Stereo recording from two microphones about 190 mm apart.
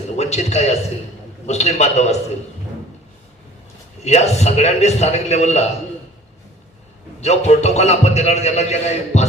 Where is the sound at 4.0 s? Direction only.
35° left (ahead or behind).